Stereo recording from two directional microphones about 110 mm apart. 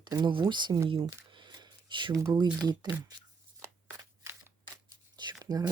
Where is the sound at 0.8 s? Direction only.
55° right (ahead or behind).